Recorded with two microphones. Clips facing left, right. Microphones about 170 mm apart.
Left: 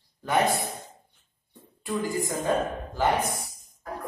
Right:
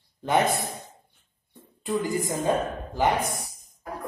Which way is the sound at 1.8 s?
20° right (ahead or behind).